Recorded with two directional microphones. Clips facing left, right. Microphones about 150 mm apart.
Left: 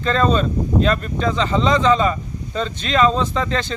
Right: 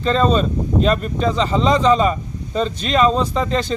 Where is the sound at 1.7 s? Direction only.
35° right (ahead or behind).